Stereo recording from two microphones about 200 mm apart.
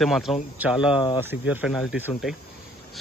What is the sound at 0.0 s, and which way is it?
Speech, centre (ahead or behind).